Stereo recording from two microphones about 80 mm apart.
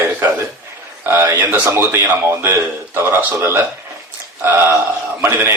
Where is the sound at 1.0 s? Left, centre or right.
Right.